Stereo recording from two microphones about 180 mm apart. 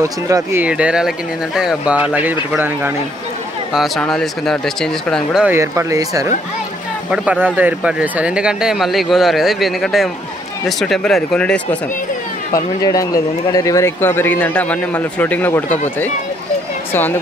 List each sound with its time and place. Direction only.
0.0 s speech: 15° right (ahead or behind)
5.6 s speech: 15° right (ahead or behind); by 11.8 s 5° left (ahead or behind)
12.5 s a man's voice: 20° left (ahead or behind)